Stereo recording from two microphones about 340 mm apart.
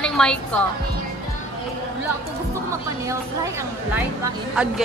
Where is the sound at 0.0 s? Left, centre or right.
Centre.